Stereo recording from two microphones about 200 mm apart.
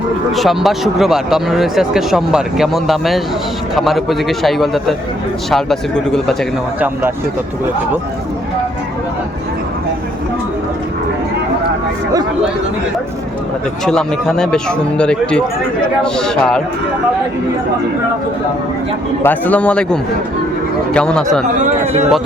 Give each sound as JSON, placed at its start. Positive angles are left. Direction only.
{"t": 0.3, "sound": "speech", "side_deg": 0}
{"t": 6.7, "sound": "speech", "side_deg": -10}
{"t": 13.8, "sound": "speech", "side_deg": 5}
{"t": 19.2, "sound": "a man's voice", "side_deg": 10}
{"t": 21.6, "sound": "speech", "side_deg": -35}